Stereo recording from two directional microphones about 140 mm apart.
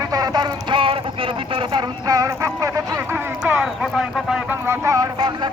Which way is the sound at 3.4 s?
5° right (ahead or behind).